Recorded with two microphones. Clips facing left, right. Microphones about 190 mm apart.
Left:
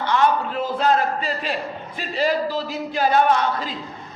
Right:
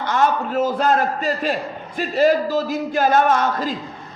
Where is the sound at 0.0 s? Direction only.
45° right (ahead or behind).